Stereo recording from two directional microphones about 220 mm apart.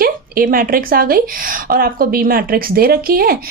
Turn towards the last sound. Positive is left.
turn(degrees=-40)  # may be behind; listen again after turning